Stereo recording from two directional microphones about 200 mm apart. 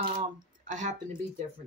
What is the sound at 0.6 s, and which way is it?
Speech, 40° right (ahead or behind).